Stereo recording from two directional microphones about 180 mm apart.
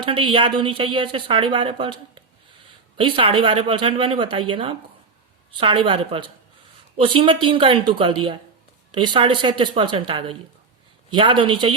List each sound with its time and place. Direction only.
0.0 s a woman's voice: 25° right (ahead or behind)